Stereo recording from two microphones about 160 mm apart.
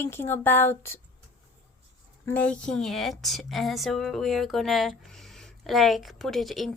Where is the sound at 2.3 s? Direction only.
10° left (ahead or behind).